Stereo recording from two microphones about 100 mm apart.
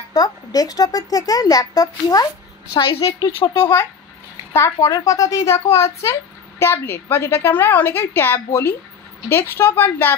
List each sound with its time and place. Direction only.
0.1 s speech: 40° left (ahead or behind)
2.8 s a woman's voice: 60° left (ahead or behind)
3.5 s a woman's voice: 25° left (ahead or behind)